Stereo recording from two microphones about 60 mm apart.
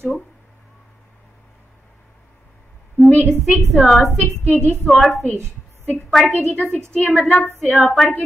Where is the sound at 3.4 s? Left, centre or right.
Centre.